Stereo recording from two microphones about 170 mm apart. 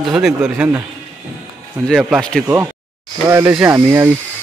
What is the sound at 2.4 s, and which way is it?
Speech, 15° right (ahead or behind).